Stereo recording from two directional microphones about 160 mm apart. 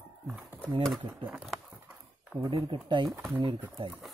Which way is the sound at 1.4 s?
Centre (ahead or behind).